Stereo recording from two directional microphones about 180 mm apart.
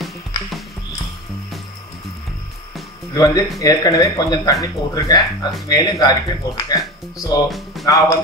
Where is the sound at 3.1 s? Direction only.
20° left (ahead or behind).